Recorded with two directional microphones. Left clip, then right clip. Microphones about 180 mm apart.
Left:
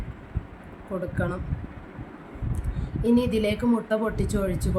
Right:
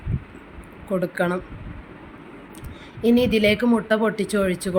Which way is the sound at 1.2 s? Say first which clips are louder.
Right 7 dB; 25° right (ahead or behind).